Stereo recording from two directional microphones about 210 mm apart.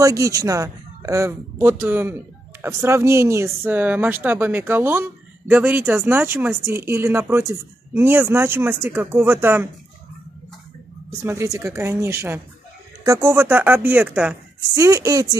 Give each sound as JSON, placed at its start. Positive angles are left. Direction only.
{"t": 0.0, "sound": "speech", "side_deg": -15}
{"t": 11.2, "sound": "speech", "side_deg": -15}